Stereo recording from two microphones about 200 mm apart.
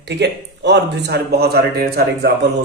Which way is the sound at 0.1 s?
60° right (ahead or behind).